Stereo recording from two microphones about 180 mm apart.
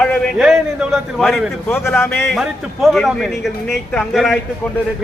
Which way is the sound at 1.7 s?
15° left (ahead or behind).